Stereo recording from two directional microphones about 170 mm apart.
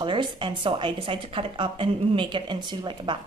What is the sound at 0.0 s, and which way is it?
A woman's voice, 30° right (ahead or behind).